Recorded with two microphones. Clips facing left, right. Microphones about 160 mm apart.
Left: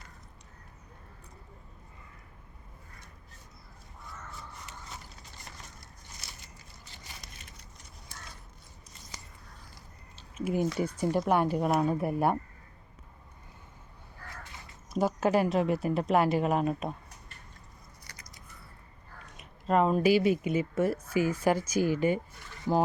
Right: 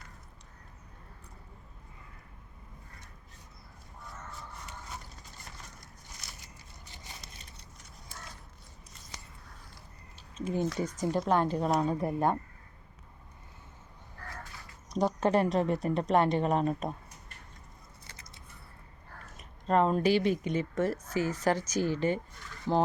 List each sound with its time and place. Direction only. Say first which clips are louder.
10.3 s speech: left 2 dB; 10° left (ahead or behind)
14.8 s a woman's voice: left 1 dB; 5° left (ahead or behind)
18.0 s biting: even; 25° right (ahead or behind)
19.4 s speech: left 1 dB; 5° left (ahead or behind)